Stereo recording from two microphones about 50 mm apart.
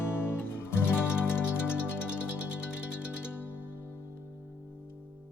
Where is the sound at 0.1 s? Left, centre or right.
Left.